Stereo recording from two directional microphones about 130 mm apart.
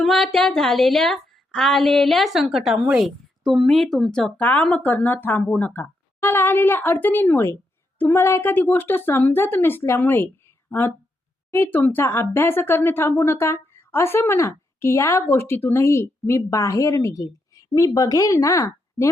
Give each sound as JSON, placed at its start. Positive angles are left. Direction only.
{"t": 0.0, "sound": "a woman's voice", "side_deg": 5}